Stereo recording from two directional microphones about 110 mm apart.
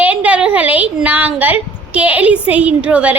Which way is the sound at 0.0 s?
10° right (ahead or behind).